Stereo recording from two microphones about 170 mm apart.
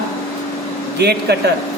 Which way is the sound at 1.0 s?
75° right (ahead or behind).